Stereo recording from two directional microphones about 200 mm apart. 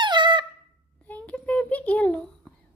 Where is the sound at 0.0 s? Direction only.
25° right (ahead or behind).